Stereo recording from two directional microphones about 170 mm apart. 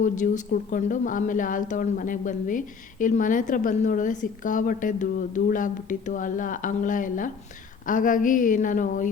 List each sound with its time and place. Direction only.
0.0 s speech: 50° left (ahead or behind)